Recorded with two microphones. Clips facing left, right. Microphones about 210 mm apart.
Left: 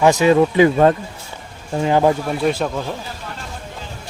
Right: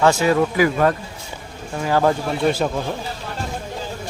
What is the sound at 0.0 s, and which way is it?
Speech, 20° left (ahead or behind).